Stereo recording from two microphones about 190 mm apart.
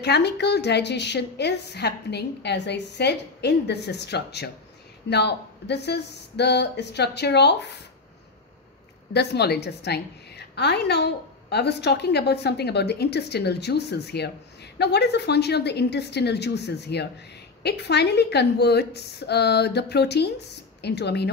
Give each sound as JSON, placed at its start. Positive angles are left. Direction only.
{"t": 0.0, "sound": "a woman's voice", "side_deg": 60}
{"t": 9.1, "sound": "a woman's voice", "side_deg": 60}